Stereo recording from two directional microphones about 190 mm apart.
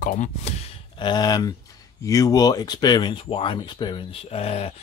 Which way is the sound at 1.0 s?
20° left (ahead or behind).